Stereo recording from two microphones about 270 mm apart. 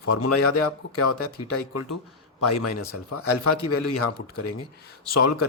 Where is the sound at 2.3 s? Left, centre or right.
Left.